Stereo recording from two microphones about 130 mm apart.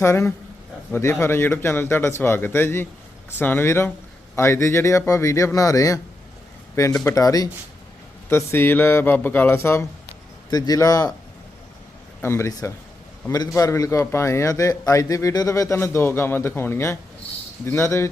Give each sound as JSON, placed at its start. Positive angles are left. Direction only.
{"t": 0.0, "sound": "a man's voice", "side_deg": 20}
{"t": 7.0, "sound": "a man's voice", "side_deg": 25}
{"t": 12.2, "sound": "a man's voice", "side_deg": 20}